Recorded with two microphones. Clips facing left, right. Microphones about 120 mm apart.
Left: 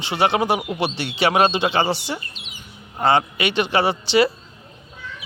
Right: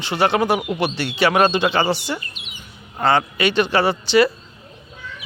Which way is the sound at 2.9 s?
20° left (ahead or behind).